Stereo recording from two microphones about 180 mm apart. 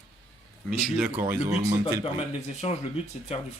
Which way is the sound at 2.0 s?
35° left (ahead or behind).